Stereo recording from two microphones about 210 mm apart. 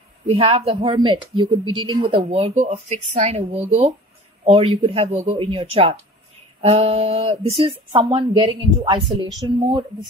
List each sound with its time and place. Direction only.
0.3 s a woman's voice: 25° right (ahead or behind)